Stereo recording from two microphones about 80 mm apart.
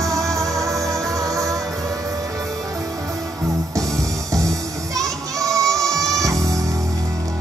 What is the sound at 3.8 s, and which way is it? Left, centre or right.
Music, right.